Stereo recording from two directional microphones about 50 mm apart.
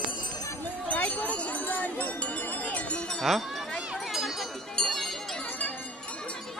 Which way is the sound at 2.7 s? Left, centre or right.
Left.